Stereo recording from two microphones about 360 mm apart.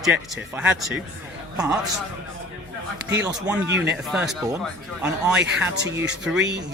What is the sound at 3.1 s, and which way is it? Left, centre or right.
Speech, centre.